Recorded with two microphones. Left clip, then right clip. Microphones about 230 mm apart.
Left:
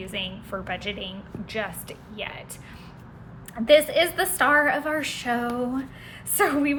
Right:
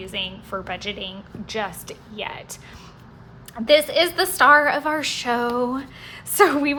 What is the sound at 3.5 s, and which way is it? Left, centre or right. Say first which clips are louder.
A woman's voice: right 1 dB; centre.